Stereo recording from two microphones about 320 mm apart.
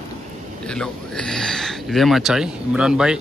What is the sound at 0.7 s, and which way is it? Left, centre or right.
Speech, centre.